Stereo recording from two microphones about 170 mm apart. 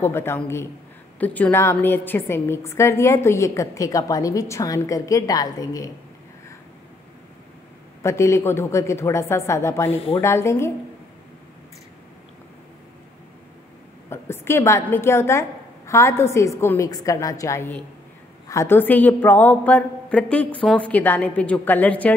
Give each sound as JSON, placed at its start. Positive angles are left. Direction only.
{"t": 0.0, "sound": "a woman's voice", "side_deg": 15}
{"t": 8.0, "sound": "a woman's voice", "side_deg": 15}
{"t": 9.8, "sound": "speech", "side_deg": 35}
{"t": 10.2, "sound": "a woman's voice", "side_deg": 15}
{"t": 14.0, "sound": "a woman's voice", "side_deg": 15}